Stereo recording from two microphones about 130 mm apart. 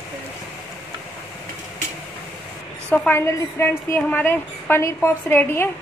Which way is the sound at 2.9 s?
15° left (ahead or behind).